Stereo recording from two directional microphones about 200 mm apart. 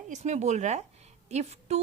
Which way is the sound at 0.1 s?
35° right (ahead or behind).